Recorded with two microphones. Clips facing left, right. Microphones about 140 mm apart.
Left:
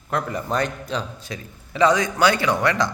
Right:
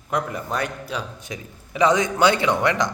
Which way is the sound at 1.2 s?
20° right (ahead or behind).